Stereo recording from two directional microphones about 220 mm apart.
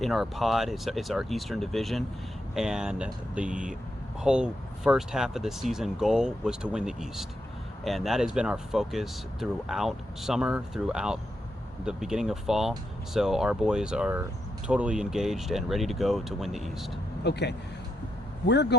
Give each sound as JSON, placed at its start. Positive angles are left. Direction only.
{"t": 0.0, "sound": "speech", "side_deg": 0}
{"t": 17.2, "sound": "speech", "side_deg": 50}